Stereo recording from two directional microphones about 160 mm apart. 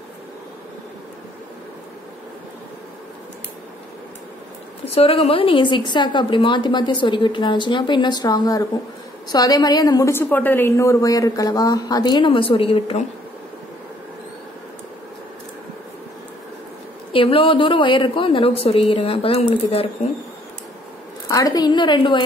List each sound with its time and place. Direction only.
4.8 s a woman's voice: 40° left (ahead or behind)
17.1 s a woman's voice: 35° left (ahead or behind)
21.3 s a woman's voice: 25° left (ahead or behind)